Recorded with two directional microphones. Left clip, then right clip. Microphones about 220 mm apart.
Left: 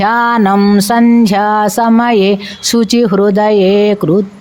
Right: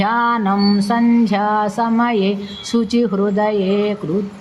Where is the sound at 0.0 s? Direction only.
50° left (ahead or behind).